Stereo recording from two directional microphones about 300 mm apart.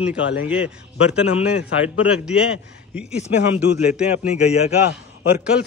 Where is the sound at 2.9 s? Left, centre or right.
Centre.